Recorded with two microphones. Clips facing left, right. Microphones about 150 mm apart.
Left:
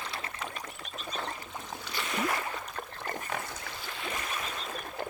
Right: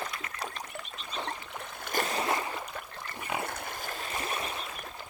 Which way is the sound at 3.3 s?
55° right (ahead or behind).